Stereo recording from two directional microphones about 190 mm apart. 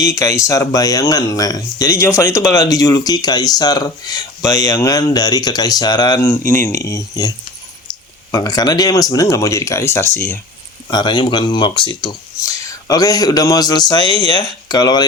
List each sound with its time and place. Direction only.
0.0 s speech: 15° left (ahead or behind)
10.8 s speech: 20° left (ahead or behind)